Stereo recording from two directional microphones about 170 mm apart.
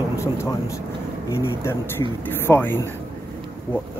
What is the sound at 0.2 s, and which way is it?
Speech, 15° left (ahead or behind).